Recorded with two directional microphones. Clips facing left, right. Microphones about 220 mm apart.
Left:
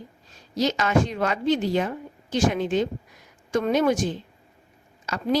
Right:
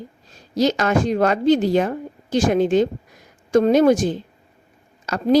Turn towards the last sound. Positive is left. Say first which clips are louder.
# right 6 dB
turn(degrees=-40)  # may be behind; listen again after turning